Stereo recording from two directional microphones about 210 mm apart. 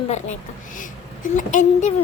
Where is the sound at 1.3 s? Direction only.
35° left (ahead or behind).